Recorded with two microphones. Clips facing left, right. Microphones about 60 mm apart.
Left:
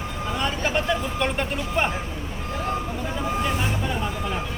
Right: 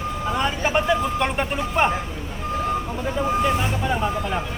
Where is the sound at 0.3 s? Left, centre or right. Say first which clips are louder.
Right 3 dB; centre.